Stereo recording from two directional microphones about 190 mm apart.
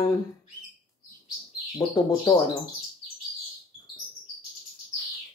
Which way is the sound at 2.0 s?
20° left (ahead or behind).